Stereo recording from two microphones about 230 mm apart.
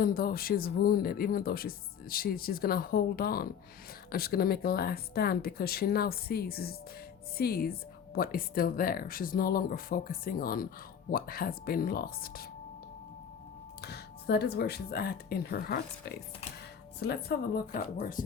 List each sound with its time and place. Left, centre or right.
0.0 s speech: left
13.8 s speech: left